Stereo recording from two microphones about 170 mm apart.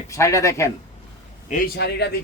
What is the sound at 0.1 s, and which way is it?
Speech, 20° left (ahead or behind).